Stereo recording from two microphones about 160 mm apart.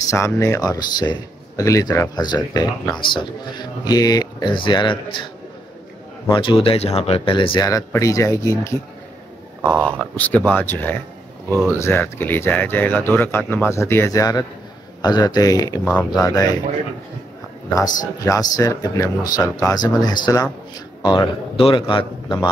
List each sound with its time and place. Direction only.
0.1 s speech: 20° left (ahead or behind)
6.2 s speech: 30° left (ahead or behind)
9.6 s speech: 5° left (ahead or behind); by 15.8 s 25° left (ahead or behind)
15.8 s speech: 10° left (ahead or behind)
16.2 s speech: 25° left (ahead or behind)
17.6 s speech: 25° left (ahead or behind)